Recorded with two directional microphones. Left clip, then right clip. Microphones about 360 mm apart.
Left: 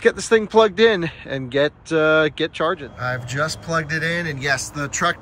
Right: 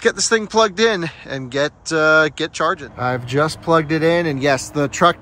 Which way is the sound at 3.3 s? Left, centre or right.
Centre.